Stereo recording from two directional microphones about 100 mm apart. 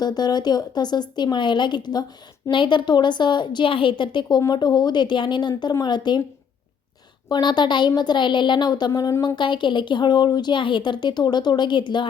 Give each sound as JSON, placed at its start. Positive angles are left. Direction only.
{"t": 0.0, "sound": "a woman's voice", "side_deg": 40}
{"t": 7.3, "sound": "a woman's voice", "side_deg": 45}